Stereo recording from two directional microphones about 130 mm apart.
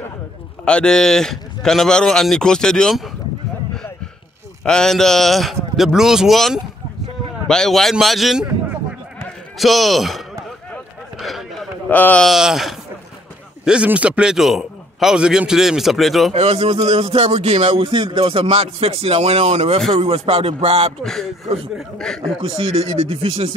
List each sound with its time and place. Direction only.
0.7 s a man's voice: 5° left (ahead or behind)
4.6 s a man's voice: 5° left (ahead or behind)
9.6 s a man's voice: centre (ahead or behind)
10.7 s a sound: centre (ahead or behind)
11.9 s a man's voice: 10° left (ahead or behind)
12.3 s a man's voice: 5° right (ahead or behind)
16.3 s speech: 55° right (ahead or behind)
16.9 s music: 55° right (ahead or behind)
17.8 s speech: 40° right (ahead or behind)
21.0 s a man's voice: centre (ahead or behind)
22.4 s speech: 45° right (ahead or behind)